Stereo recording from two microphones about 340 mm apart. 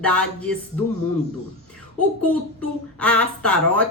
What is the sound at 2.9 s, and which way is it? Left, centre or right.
Speech, centre.